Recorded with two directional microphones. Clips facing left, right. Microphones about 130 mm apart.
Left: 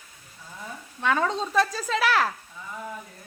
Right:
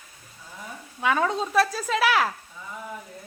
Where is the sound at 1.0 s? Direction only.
5° right (ahead or behind).